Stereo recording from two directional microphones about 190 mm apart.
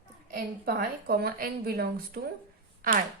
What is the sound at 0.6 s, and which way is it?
A woman's voice, 55° right (ahead or behind).